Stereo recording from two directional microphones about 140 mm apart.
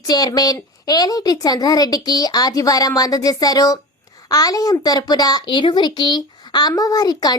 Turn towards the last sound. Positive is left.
turn(degrees=30)  # may be behind; listen again after turning